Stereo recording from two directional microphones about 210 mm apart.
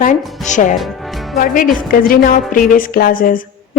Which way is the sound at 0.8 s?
Centre (ahead or behind).